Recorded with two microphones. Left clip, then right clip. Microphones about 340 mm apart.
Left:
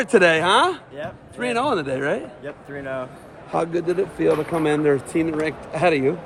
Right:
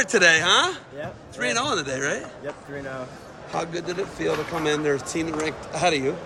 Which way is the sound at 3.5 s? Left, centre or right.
Centre.